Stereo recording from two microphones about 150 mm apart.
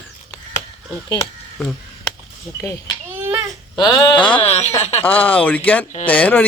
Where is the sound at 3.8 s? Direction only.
30° left (ahead or behind).